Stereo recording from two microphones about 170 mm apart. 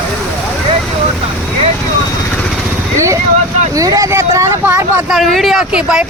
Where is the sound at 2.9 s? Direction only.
15° right (ahead or behind).